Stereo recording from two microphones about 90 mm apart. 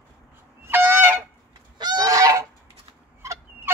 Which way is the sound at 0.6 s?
25° right (ahead or behind).